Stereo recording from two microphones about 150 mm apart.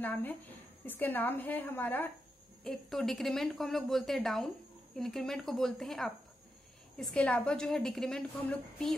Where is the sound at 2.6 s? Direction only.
Centre (ahead or behind).